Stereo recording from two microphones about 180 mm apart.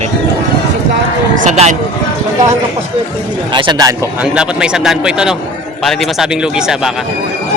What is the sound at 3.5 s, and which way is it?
Speech, 25° right (ahead or behind).